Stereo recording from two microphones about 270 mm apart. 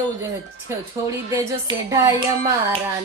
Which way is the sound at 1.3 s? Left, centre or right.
Centre.